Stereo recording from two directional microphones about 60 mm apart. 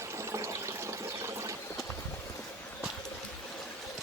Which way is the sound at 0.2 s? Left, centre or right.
Right.